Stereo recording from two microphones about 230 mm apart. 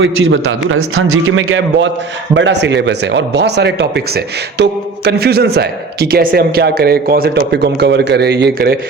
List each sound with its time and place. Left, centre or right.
0.0 s a man's voice: right